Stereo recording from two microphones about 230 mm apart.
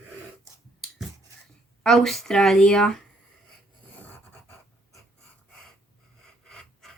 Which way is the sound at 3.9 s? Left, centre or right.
Centre.